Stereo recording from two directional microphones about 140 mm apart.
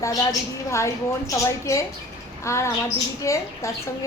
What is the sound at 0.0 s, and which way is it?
A woman's voice, 25° left (ahead or behind).